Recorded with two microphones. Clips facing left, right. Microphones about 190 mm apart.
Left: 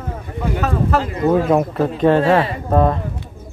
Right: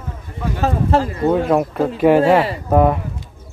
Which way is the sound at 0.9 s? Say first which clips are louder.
Right 4 dB; 25° right (ahead or behind).